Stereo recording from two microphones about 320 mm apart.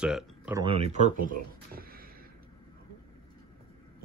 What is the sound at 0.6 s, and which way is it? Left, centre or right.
Speech, centre.